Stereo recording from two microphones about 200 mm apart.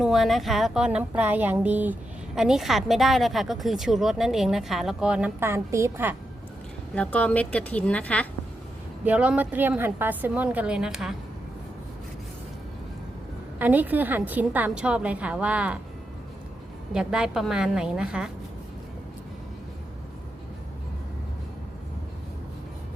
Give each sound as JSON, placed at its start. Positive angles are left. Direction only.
{"t": 0.0, "sound": "speech", "side_deg": 0}
{"t": 6.9, "sound": "speech", "side_deg": 5}
{"t": 9.0, "sound": "a woman's voice", "side_deg": -5}
{"t": 13.6, "sound": "a woman's voice", "side_deg": -10}
{"t": 16.9, "sound": "speech", "side_deg": -5}